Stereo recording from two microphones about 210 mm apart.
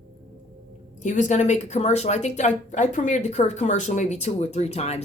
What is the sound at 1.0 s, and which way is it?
Speech, 35° left (ahead or behind).